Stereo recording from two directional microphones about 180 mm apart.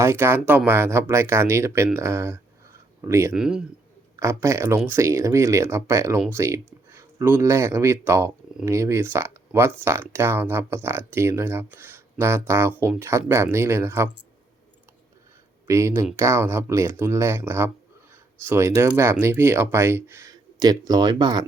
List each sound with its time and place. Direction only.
0.0 s speech: 15° right (ahead or behind)
3.3 s a man's voice: 5° right (ahead or behind)
4.2 s speech: 15° right (ahead or behind)
15.6 s speech: 15° right (ahead or behind)